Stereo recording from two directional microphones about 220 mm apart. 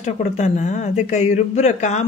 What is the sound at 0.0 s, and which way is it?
Speech, 35° left (ahead or behind).